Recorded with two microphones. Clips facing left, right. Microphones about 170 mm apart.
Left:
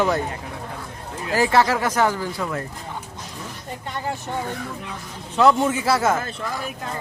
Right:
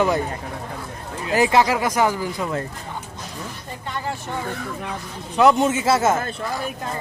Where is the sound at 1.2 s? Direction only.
20° right (ahead or behind).